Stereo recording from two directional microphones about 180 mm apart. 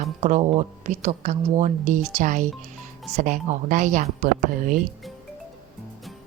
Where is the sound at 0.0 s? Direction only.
40° right (ahead or behind).